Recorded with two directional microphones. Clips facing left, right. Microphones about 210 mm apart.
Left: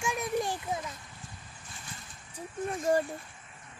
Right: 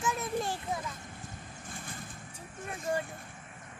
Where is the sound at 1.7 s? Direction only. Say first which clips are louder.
Right 4 dB; 50° right (ahead or behind).